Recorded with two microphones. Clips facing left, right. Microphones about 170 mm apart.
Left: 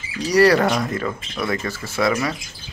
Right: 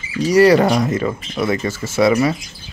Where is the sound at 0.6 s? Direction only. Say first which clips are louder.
Right 5 dB; 20° right (ahead or behind).